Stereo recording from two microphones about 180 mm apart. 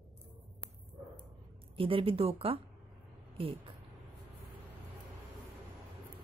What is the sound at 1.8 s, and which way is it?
Speech, 30° right (ahead or behind).